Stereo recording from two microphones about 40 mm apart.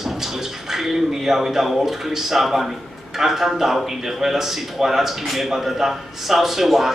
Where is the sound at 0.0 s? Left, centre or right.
Centre.